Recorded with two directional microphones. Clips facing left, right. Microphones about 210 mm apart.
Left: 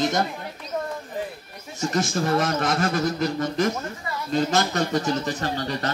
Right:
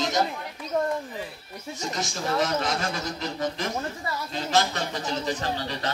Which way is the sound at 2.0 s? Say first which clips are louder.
Left 5 dB; 55° left (ahead or behind).